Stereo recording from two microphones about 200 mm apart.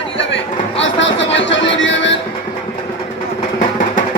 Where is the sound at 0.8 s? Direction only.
65° left (ahead or behind).